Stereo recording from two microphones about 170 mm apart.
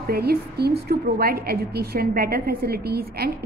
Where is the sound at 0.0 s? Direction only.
65° right (ahead or behind).